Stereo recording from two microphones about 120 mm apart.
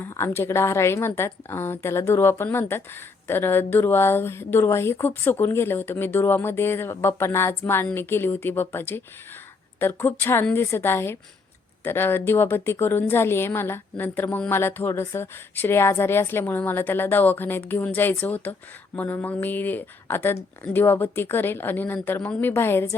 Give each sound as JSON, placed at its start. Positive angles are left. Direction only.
{"t": 0.0, "sound": "a woman's voice", "side_deg": 20}